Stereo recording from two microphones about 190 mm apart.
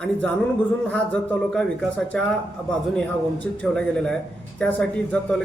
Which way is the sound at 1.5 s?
5° left (ahead or behind).